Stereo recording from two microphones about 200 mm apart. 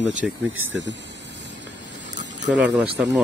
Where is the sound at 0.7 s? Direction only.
65° right (ahead or behind).